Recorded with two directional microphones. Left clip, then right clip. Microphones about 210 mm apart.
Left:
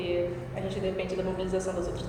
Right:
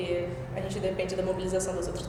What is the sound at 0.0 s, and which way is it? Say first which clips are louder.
A woman's voice: left 1 dB; 55° right (ahead or behind).